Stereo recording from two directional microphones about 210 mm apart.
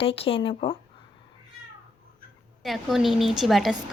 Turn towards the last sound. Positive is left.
turn(degrees=0)  # may be behind; listen again after turning